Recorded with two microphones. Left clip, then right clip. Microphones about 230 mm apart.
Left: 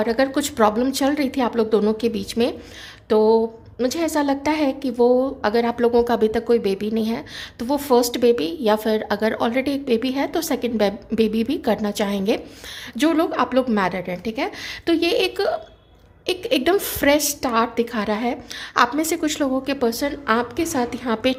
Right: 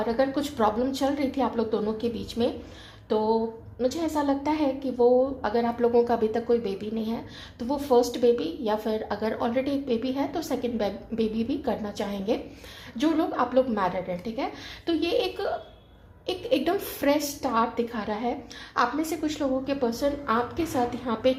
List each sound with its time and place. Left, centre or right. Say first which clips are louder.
0.0 s a woman's voice: left 5 dB; left